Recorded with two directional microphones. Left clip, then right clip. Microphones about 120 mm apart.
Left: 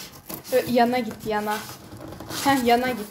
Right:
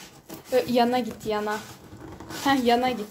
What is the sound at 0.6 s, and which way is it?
Speech, 40° right (ahead or behind).